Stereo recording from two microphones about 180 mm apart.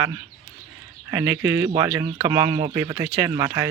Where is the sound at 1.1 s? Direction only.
10° right (ahead or behind).